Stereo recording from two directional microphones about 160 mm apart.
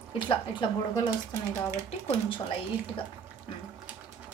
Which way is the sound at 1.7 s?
20° right (ahead or behind).